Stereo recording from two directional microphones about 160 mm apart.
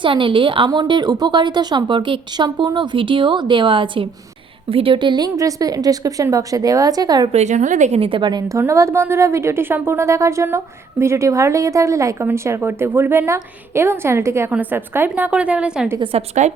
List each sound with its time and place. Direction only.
0.0 s a woman's voice: 30° right (ahead or behind)
7.3 s a woman's voice: 50° right (ahead or behind); by 15.9 s 5° right (ahead or behind)
16.1 s a woman's voice: 40° right (ahead or behind)